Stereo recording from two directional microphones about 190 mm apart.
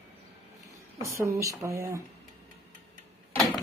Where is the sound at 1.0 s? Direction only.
15° right (ahead or behind).